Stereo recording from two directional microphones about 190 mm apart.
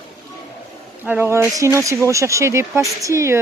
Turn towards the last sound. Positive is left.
turn(degrees=-15)  # may be behind; listen again after turning